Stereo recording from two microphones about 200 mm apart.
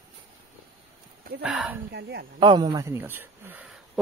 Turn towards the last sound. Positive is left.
turn(degrees=-10)  # may be behind; listen again after turning